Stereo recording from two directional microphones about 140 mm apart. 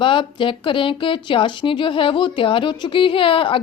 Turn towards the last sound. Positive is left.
turn(degrees=40)  # may be behind; listen again after turning